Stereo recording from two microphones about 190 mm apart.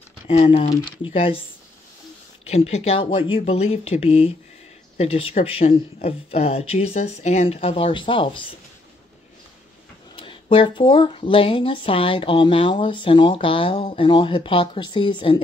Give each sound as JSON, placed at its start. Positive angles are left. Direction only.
{"t": 0.3, "sound": "speech", "side_deg": 30}
{"t": 2.4, "sound": "speech", "side_deg": 35}
{"t": 10.1, "sound": "speech", "side_deg": 25}